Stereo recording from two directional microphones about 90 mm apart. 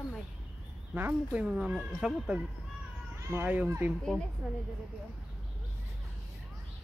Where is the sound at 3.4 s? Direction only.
15° right (ahead or behind).